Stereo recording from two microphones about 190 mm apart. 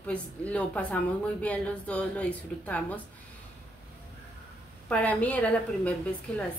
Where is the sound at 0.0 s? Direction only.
5° left (ahead or behind).